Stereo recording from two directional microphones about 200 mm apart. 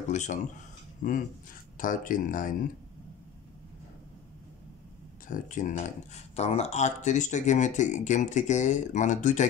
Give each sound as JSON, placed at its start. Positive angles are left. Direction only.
{"t": 0.1, "sound": "speech", "side_deg": 35}
{"t": 5.3, "sound": "speech", "side_deg": 40}